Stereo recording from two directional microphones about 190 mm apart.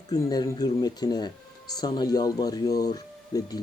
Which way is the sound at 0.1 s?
20° left (ahead or behind).